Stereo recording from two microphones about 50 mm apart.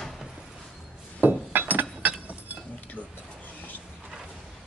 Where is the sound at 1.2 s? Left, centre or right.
Right.